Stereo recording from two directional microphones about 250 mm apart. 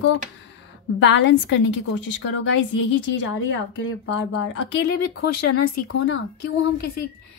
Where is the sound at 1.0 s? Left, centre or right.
Left.